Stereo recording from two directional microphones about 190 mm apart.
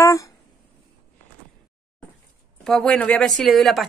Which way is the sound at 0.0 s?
15° left (ahead or behind).